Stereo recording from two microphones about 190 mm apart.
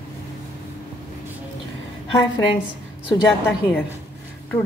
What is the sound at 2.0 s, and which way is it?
Speech, 25° left (ahead or behind).